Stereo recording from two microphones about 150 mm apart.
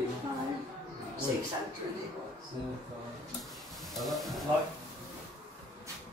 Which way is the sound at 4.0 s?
Centre (ahead or behind).